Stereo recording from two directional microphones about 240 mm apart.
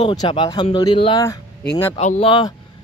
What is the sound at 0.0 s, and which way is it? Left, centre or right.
Speech, centre.